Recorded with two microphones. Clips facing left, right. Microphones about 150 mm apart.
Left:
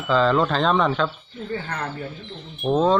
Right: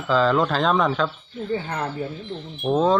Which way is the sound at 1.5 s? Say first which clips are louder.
Right 3 dB; 15° right (ahead or behind).